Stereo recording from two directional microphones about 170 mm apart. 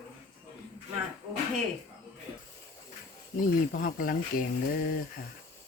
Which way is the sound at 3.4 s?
55° left (ahead or behind).